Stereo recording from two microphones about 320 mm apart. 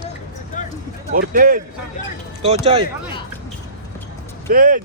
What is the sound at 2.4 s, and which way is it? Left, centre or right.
Speech, centre.